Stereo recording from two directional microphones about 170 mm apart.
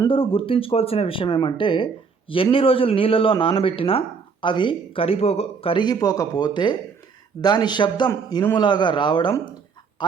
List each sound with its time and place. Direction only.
0.1 s a man's voice: 30° left (ahead or behind)